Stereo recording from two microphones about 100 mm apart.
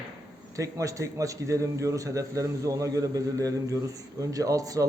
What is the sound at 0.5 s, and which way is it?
A man's voice, 35° right (ahead or behind).